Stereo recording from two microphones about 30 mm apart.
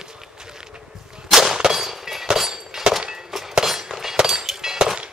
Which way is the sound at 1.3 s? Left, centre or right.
Centre.